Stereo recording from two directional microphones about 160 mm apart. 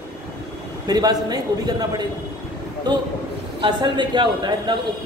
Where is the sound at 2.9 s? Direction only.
25° right (ahead or behind).